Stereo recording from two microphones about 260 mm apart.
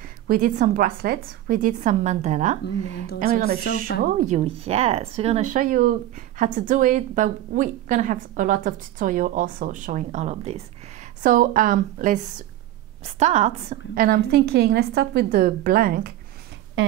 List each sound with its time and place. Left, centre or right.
0.3 s a woman's voice: right
16.8 s speech: right